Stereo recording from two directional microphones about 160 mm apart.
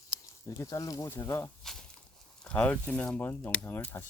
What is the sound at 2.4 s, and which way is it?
Speech, 5° left (ahead or behind).